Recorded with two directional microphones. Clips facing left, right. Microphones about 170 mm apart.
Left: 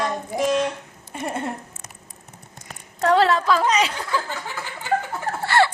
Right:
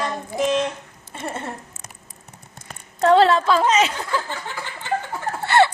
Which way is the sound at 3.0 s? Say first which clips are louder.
Right 3 dB; 25° right (ahead or behind).